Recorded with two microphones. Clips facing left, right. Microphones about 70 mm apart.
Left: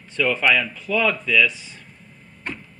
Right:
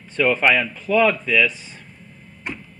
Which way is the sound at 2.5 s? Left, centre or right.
Centre.